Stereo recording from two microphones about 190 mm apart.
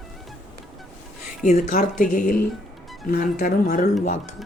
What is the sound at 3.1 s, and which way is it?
Speech, 45° left (ahead or behind).